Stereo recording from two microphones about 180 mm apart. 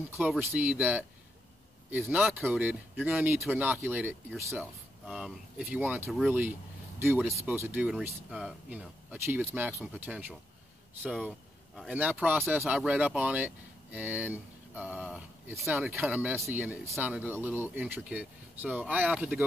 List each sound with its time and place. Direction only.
0.1 s speech: 5° right (ahead or behind)